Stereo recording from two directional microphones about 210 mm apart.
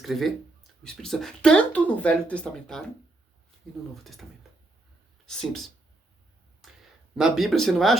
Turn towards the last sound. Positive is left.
turn(degrees=0)  # may be behind; listen again after turning